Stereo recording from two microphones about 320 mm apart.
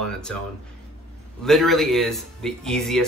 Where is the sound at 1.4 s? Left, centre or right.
Centre.